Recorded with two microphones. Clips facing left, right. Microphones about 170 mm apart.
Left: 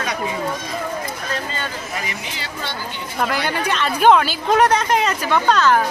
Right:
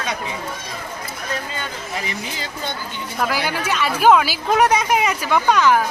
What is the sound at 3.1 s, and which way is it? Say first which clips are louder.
Speech: left 1 dB; 5° right (ahead or behind).